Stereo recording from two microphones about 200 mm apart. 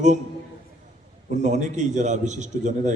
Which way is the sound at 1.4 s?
35° right (ahead or behind).